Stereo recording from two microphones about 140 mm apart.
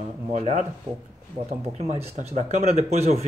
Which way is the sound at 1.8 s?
50° right (ahead or behind).